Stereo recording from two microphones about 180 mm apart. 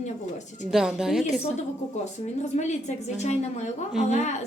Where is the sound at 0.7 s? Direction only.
5° right (ahead or behind).